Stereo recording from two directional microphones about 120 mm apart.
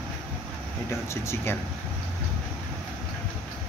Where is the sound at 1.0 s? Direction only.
20° left (ahead or behind).